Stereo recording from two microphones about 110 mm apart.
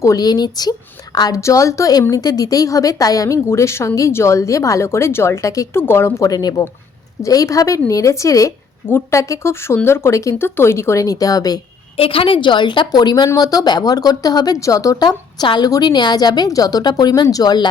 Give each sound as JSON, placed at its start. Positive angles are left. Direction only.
{"t": 0.0, "sound": "a woman's voice", "side_deg": 35}
{"t": 11.9, "sound": "a woman's voice", "side_deg": 55}